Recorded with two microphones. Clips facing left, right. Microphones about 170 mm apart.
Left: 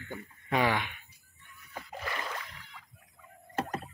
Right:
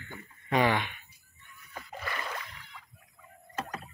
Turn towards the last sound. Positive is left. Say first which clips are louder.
# left 4 dB
turn(degrees=30)  # may be behind; listen again after turning